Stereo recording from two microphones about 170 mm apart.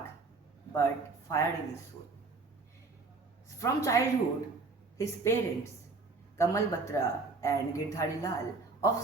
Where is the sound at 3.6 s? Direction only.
20° left (ahead or behind).